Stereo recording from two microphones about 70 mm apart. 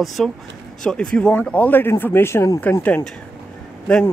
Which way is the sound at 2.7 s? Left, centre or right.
Left.